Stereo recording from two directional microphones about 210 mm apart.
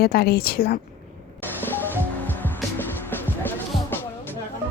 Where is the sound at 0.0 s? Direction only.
45° left (ahead or behind).